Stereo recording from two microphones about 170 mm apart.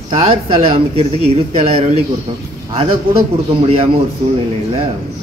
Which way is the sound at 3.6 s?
35° right (ahead or behind).